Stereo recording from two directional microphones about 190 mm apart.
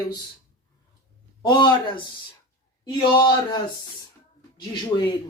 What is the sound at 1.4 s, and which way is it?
Speech, 25° left (ahead or behind).